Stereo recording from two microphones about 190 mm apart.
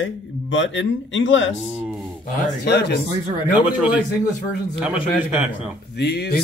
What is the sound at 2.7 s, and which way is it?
Speech, 60° left (ahead or behind).